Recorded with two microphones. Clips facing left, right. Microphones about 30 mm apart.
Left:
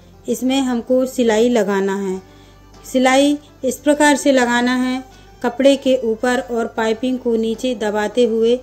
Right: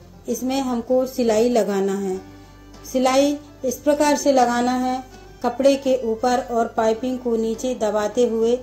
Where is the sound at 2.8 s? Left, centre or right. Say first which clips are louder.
Left 4 dB; left.